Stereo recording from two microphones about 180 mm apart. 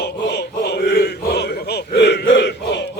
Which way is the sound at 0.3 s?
70° left (ahead or behind).